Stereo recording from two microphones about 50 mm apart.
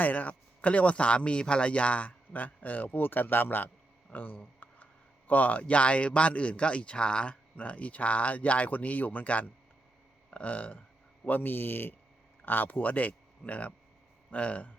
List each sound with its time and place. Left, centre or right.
0.0 s speech: left
4.6 s a sound: left
5.3 s speech: left